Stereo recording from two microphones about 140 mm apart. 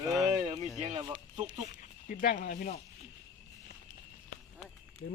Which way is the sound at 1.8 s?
75° left (ahead or behind).